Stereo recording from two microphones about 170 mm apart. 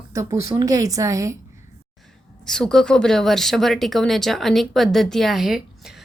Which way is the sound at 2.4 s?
5° left (ahead or behind).